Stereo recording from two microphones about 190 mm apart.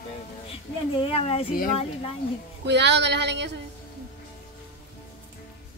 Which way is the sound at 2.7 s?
65° right (ahead or behind).